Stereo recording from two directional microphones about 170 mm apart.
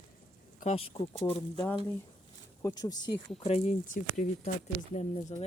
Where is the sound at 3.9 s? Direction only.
50° left (ahead or behind).